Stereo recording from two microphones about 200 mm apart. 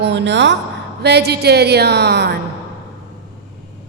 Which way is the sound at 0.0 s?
60° right (ahead or behind).